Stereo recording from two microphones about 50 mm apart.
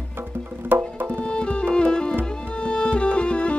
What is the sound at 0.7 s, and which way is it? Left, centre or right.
Music, right.